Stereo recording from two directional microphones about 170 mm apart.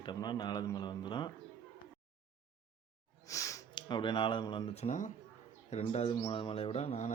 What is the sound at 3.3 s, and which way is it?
A man's voice, 20° left (ahead or behind).